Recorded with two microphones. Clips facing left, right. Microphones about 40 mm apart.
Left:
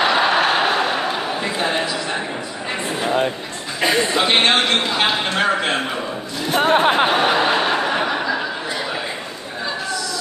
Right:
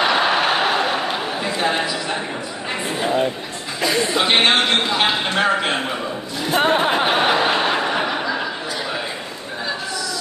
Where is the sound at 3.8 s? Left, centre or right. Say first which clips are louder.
Left 2 dB; left.